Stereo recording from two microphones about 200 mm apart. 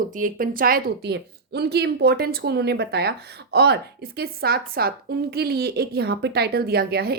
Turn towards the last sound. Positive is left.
turn(degrees=-50)  # may be behind; listen again after turning